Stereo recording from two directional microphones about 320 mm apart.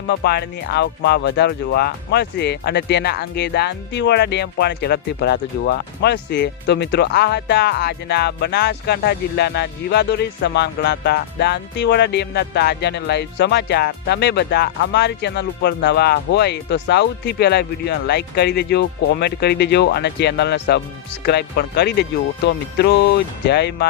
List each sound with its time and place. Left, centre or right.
0.1 s speech: left